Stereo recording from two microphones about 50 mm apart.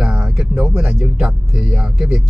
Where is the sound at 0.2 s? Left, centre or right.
Centre.